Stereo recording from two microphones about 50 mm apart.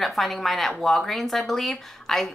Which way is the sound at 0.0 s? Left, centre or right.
Centre.